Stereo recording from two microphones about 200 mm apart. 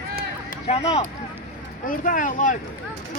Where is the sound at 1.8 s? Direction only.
40° left (ahead or behind).